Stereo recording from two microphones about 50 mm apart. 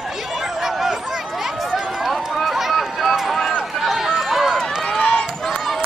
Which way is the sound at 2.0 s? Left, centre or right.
Centre.